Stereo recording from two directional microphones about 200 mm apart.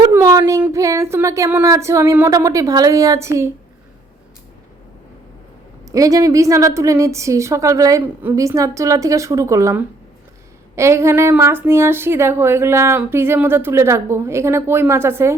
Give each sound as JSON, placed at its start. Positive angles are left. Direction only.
{"t": 0.0, "sound": "speech", "side_deg": -15}
{"t": 5.9, "sound": "speech", "side_deg": -15}